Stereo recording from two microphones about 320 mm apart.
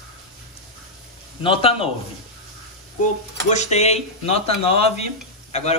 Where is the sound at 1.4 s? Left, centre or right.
Centre.